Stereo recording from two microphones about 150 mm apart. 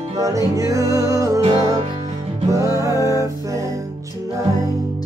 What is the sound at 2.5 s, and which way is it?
Music, 20° right (ahead or behind).